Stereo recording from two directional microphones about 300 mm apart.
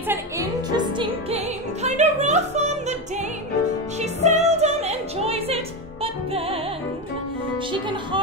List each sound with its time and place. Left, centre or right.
0.1 s music: centre
4.0 s music: right